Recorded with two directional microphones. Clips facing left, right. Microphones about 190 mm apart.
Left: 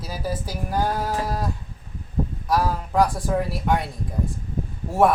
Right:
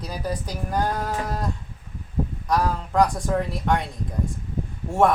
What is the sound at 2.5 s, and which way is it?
A woman's voice, 5° left (ahead or behind).